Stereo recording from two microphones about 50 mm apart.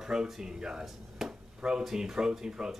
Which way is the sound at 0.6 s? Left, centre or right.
Centre.